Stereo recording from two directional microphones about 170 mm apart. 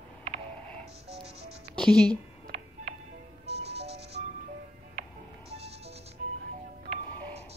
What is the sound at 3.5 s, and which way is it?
Music, 40° right (ahead or behind).